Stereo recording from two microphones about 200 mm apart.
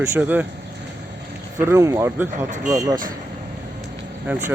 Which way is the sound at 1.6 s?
15° right (ahead or behind).